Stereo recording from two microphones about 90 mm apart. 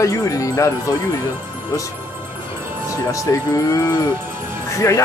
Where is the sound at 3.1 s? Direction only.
35° left (ahead or behind).